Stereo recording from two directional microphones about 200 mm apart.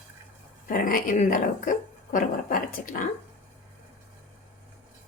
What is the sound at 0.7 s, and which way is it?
Speech, 45° left (ahead or behind).